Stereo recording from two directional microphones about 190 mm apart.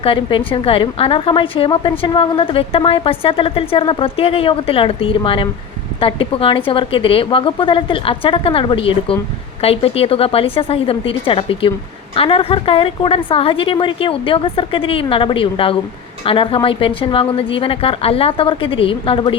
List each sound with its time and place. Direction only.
0.0 s a woman's voice: 25° left (ahead or behind)